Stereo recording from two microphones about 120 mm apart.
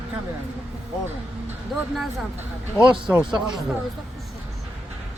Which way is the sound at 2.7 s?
10° right (ahead or behind).